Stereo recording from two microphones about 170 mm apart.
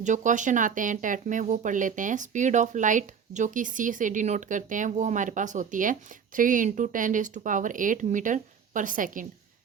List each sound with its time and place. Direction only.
0.0 s speech: 45° right (ahead or behind)